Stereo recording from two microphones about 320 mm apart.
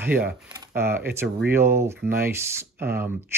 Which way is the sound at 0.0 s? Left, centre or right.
Centre.